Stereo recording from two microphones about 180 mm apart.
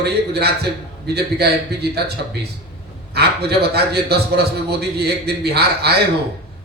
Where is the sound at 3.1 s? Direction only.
65° right (ahead or behind).